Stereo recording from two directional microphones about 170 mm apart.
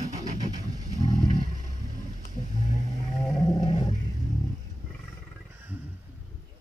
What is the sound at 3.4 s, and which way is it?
Roaring cats, 25° left (ahead or behind).